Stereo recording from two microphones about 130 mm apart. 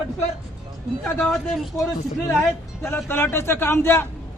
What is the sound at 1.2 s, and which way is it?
Speech, centre (ahead or behind).